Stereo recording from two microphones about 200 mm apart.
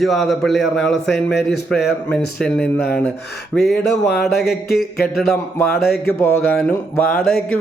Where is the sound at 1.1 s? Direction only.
55° left (ahead or behind).